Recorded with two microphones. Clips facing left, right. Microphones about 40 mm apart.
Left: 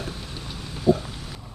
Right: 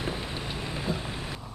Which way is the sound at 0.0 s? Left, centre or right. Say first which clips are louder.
Right 2 dB; right.